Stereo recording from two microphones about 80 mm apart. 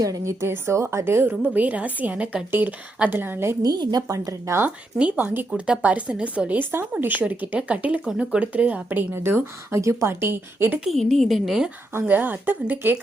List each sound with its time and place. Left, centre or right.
0.0 s speech: right
0.4 s a woman's voice: right
1.5 s speech: centre
3.6 s speech: right
4.6 s speech: centre
10.8 s a woman's voice: centre
11.9 s speech: right